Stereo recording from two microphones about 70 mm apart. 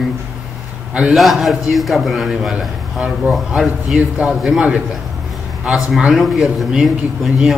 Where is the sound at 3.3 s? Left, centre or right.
Centre.